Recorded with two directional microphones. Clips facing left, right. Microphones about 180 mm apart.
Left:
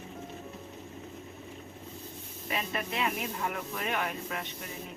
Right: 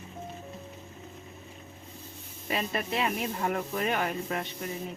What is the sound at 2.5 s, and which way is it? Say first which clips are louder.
Speech: right 3 dB; 35° right (ahead or behind).